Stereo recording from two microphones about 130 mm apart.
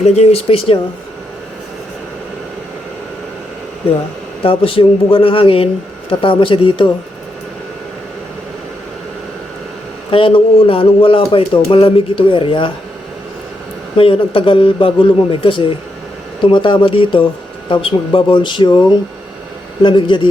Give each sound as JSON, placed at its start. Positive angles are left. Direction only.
{"t": 0.0, "sound": "a man's voice", "side_deg": 55}
{"t": 4.4, "sound": "a man's voice", "side_deg": 45}
{"t": 10.1, "sound": "a man's voice", "side_deg": 45}
{"t": 13.9, "sound": "a man's voice", "side_deg": 45}